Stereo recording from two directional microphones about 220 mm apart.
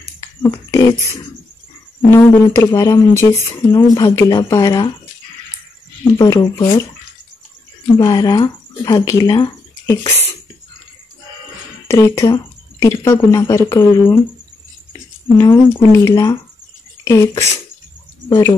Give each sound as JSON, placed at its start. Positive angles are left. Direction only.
{"t": 0.2, "sound": "a sound", "side_deg": 15}
{"t": 2.0, "sound": "a woman's voice", "side_deg": 10}
{"t": 6.1, "sound": "a woman's voice", "side_deg": 15}
{"t": 8.0, "sound": "speech", "side_deg": 20}
{"t": 11.9, "sound": "a woman's voice", "side_deg": 10}